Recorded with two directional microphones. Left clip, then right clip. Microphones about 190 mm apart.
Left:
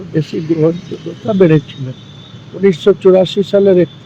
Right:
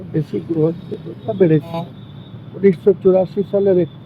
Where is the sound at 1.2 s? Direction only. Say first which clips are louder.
Left 5 dB; 60° left (ahead or behind).